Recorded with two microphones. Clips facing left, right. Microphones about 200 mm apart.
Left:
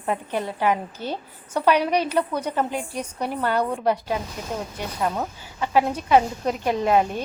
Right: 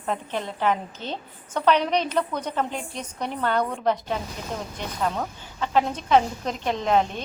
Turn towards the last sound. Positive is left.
turn(degrees=10)  # may be behind; listen again after turning